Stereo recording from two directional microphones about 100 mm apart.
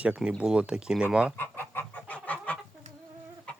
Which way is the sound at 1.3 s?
20° left (ahead or behind).